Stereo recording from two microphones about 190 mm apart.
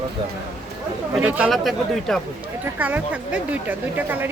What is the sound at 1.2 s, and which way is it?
Speech, 10° right (ahead or behind).